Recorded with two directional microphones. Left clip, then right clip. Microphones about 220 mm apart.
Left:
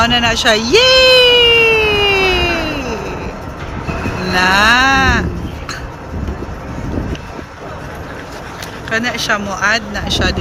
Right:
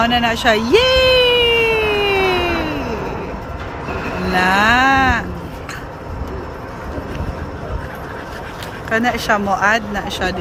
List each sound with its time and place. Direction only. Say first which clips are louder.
0.0 s a sound: left 3 dB; 10° right (ahead or behind)
4.3 s speech: left 3 dB; 10° right (ahead or behind)
8.9 s speech: even; 20° right (ahead or behind)